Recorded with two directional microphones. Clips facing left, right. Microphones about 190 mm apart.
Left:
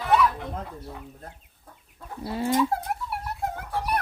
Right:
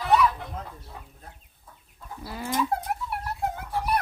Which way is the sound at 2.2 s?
25° left (ahead or behind).